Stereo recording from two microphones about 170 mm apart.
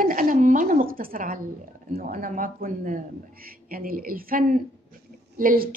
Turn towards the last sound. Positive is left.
turn(degrees=-55)  # may be behind; listen again after turning